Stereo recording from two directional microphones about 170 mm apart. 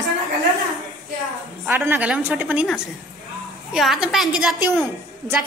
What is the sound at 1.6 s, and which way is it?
A woman's voice, 10° right (ahead or behind).